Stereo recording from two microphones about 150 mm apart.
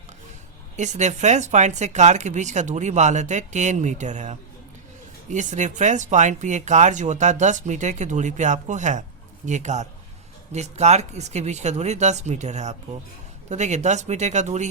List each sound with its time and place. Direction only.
0.8 s speech: 50° right (ahead or behind)